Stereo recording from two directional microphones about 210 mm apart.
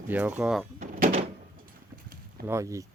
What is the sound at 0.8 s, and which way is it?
Door, 30° right (ahead or behind).